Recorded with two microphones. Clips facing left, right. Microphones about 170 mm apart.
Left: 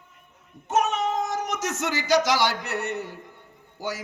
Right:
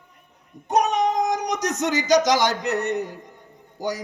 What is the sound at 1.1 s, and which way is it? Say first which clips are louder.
A man's voice: right 4 dB; 15° right (ahead or behind).